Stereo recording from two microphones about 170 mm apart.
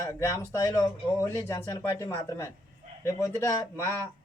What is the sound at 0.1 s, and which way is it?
A man's voice, 20° left (ahead or behind).